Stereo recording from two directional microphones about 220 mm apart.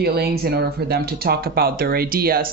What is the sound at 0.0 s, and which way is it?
Speech, 45° right (ahead or behind).